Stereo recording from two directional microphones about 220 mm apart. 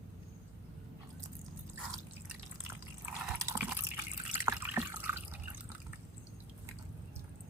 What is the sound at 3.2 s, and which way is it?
Water, 10° right (ahead or behind).